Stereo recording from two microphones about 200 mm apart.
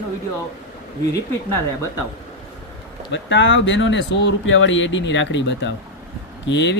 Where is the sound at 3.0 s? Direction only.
65° left (ahead or behind).